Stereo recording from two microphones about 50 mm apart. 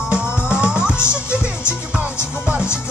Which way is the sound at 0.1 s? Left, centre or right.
Centre.